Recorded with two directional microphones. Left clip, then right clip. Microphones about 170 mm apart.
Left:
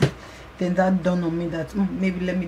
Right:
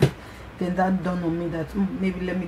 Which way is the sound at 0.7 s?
5° left (ahead or behind).